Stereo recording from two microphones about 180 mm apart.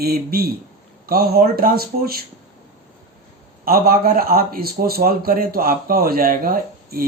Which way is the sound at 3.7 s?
55° right (ahead or behind).